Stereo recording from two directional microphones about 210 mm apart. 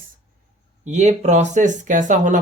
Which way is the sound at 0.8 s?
35° right (ahead or behind).